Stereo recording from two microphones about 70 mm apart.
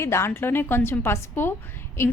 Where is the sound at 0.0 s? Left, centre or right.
Left.